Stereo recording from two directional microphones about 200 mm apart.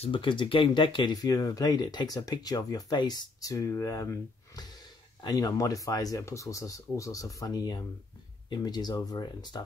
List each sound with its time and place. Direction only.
0.0 s speech: 25° left (ahead or behind)